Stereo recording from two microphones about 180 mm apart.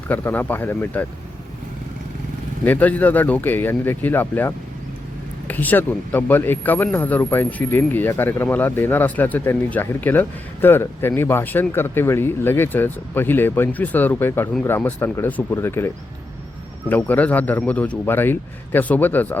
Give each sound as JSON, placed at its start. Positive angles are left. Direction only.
{"t": 0.1, "sound": "speech", "side_deg": 10}
{"t": 2.6, "sound": "speech", "side_deg": 10}
{"t": 16.9, "sound": "speech", "side_deg": 10}